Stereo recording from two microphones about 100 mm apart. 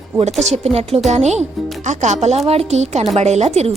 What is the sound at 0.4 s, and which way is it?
Speech, 90° right.